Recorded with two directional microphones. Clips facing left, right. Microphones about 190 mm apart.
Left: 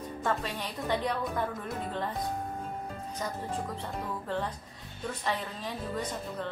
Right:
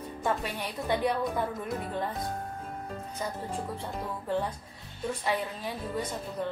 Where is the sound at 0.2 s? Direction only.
10° right (ahead or behind).